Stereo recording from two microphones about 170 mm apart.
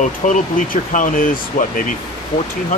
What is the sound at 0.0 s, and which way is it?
Speech, 45° left (ahead or behind).